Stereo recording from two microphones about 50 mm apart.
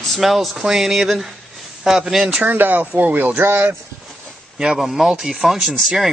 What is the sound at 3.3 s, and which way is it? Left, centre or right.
Speech, right.